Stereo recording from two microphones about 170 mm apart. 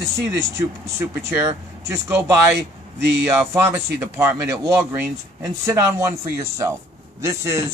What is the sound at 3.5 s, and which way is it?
Speech, 15° right (ahead or behind).